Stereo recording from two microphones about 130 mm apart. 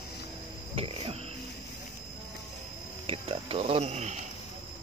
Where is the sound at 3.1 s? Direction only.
50° right (ahead or behind).